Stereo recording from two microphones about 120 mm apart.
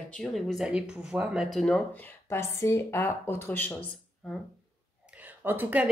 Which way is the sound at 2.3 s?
20° left (ahead or behind).